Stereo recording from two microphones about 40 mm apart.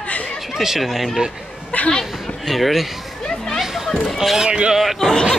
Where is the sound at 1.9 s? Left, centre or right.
Centre.